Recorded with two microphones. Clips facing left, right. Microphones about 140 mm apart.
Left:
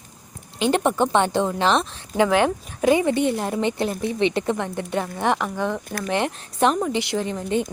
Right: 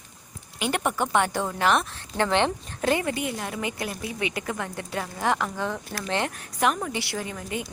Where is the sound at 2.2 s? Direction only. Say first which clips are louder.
Left 4 dB; 10° left (ahead or behind).